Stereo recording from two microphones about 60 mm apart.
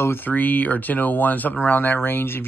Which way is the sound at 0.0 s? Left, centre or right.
Left.